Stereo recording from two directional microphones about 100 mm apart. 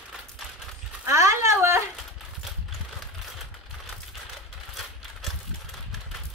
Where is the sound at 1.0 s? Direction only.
30° right (ahead or behind).